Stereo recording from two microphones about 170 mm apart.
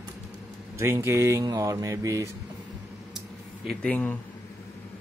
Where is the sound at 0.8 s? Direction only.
15° right (ahead or behind).